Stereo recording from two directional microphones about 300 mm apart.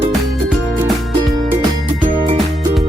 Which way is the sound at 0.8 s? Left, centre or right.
Centre.